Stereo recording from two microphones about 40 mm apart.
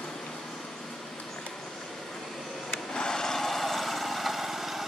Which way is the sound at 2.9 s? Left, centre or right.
Centre.